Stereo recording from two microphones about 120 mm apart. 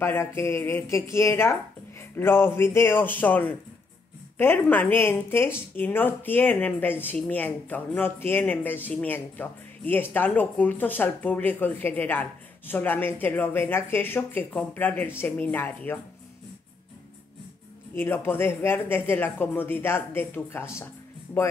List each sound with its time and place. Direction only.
0.0 s speech: 20° left (ahead or behind)
17.9 s speech: 20° left (ahead or behind)